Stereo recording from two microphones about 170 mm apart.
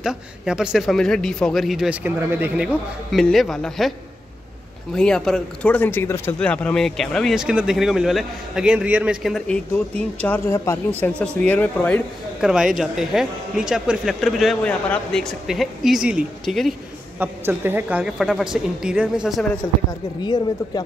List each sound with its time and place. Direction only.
0.0 s speech: 5° right (ahead or behind)
4.9 s speech: 5° left (ahead or behind)
10.2 s speech: 15° left (ahead or behind)
12.4 s speech: 5° right (ahead or behind)
17.2 s a woman's voice: 10° right (ahead or behind)
19.9 s speech: 25° left (ahead or behind)